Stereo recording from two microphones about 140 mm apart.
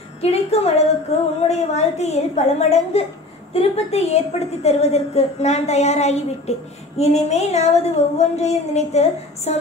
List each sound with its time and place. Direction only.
0.2 s a woman's voice: 50° left (ahead or behind)